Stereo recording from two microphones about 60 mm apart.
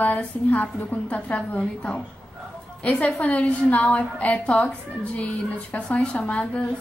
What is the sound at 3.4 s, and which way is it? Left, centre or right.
A woman's voice, left.